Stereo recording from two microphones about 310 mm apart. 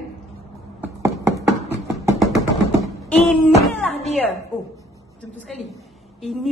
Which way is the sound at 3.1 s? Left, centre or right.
Centre.